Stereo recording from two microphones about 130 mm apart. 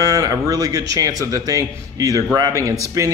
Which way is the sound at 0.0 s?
25° right (ahead or behind).